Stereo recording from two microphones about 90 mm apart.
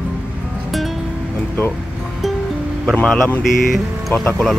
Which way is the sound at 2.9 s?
5° left (ahead or behind).